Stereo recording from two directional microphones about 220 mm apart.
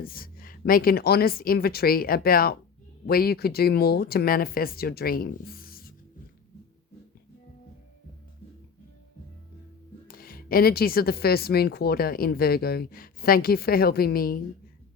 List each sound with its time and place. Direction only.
0.0 s speech: 40° left (ahead or behind)
10.1 s speech: 40° left (ahead or behind)